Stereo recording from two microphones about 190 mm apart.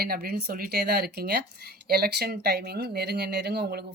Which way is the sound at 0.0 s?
55° right (ahead or behind).